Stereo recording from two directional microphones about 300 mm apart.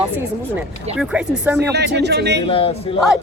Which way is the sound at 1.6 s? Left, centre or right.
Right.